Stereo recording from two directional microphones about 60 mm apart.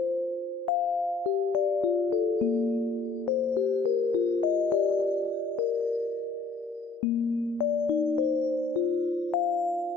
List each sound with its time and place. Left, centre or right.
4.5 s music: left
9.3 s music: centre